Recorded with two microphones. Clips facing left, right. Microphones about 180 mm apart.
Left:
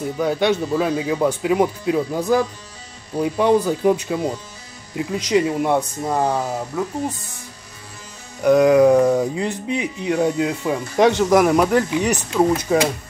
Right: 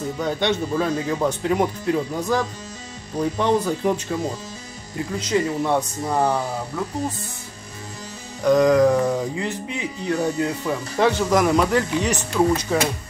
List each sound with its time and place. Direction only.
0.2 s speech: 10° left (ahead or behind)
8.5 s speech: 10° left (ahead or behind)